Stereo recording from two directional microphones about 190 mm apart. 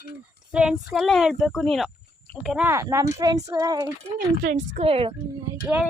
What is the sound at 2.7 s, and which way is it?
Speech, 15° right (ahead or behind).